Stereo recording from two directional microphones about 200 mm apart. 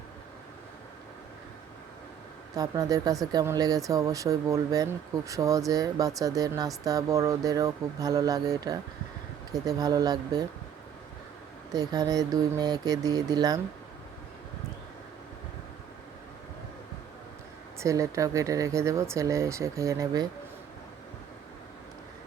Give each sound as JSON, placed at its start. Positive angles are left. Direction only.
{"t": 2.6, "sound": "speech", "side_deg": -20}
{"t": 11.7, "sound": "speech", "side_deg": -20}
{"t": 17.7, "sound": "speech", "side_deg": -15}